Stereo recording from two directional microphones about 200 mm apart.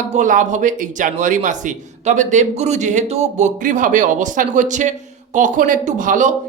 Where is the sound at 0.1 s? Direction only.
40° right (ahead or behind).